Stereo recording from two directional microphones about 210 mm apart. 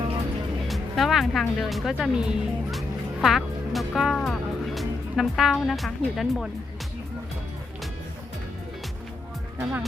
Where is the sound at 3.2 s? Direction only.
Centre (ahead or behind).